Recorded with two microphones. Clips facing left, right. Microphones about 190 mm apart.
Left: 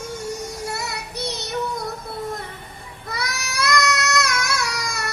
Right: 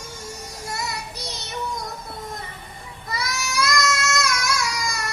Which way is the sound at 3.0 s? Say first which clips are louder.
Right 1 dB; 60° left (ahead or behind).